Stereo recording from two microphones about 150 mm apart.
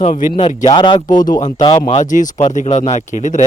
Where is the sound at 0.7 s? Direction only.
30° left (ahead or behind).